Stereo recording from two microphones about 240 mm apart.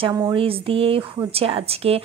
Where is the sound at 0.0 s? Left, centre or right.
Right.